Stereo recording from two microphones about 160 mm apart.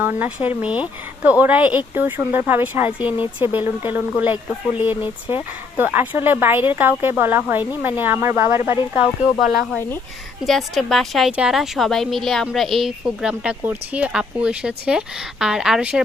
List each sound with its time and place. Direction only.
0.0 s speech: 10° right (ahead or behind)
9.4 s a woman's voice: centre (ahead or behind)